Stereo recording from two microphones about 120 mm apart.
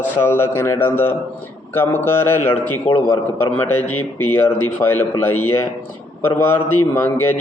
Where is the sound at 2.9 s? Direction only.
70° left (ahead or behind).